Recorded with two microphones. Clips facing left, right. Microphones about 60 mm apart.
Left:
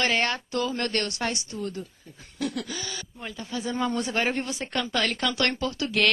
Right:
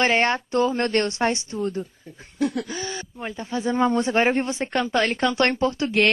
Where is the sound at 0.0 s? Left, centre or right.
Right.